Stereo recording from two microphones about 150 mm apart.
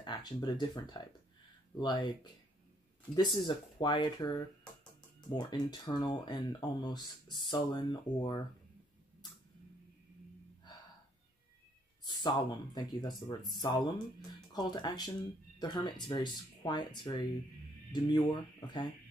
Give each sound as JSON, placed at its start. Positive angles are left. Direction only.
{"t": 0.0, "sound": "speech", "side_deg": 30}
{"t": 3.2, "sound": "speech", "side_deg": 30}
{"t": 12.1, "sound": "speech", "side_deg": 30}